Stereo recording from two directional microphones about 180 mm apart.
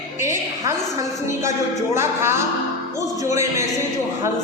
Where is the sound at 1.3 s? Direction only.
15° right (ahead or behind).